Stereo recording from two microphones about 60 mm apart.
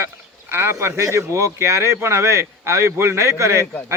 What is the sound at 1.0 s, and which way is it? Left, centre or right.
Speech, right.